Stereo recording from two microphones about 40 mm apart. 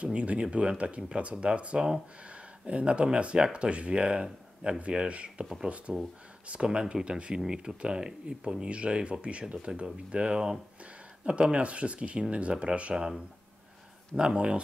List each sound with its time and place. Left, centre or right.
0.0 s speech: right
5.9 s speech: centre
6.4 s speech: right
11.5 s speech: right
14.1 s speech: right